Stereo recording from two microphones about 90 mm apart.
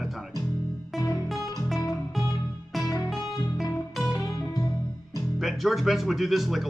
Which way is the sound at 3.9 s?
5° right (ahead or behind).